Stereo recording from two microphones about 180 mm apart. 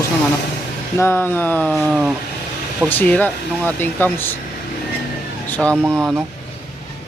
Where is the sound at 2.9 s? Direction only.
10° left (ahead or behind).